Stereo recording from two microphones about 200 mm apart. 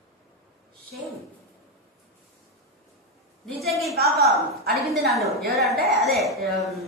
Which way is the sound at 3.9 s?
50° right (ahead or behind).